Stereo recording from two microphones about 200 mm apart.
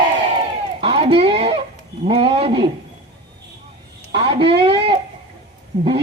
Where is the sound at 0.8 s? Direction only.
30° right (ahead or behind).